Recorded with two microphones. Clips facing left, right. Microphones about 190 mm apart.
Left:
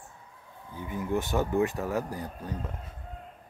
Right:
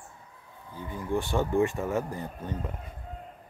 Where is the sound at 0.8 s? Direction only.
20° left (ahead or behind).